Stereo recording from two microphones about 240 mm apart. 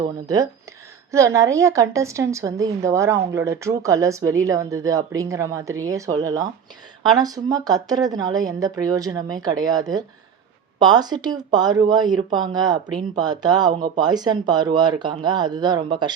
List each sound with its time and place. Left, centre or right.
0.0 s a woman's voice: centre